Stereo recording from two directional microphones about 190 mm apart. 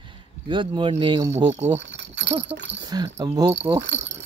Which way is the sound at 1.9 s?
65° right (ahead or behind).